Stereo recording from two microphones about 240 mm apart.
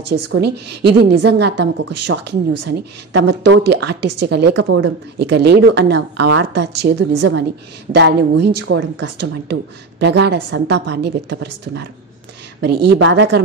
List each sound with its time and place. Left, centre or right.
0.0 s a woman's voice: right
1.9 s speech: right
3.3 s a woman's voice: right
12.6 s a woman's voice: right